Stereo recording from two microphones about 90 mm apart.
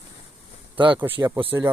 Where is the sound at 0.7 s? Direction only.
65° right (ahead or behind).